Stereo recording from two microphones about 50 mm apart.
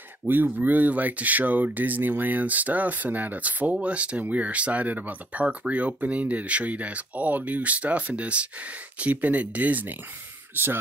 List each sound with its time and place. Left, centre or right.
0.3 s speech: right
10.5 s speech: right